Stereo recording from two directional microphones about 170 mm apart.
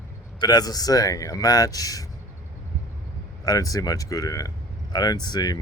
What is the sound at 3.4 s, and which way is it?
Speech, 20° left (ahead or behind).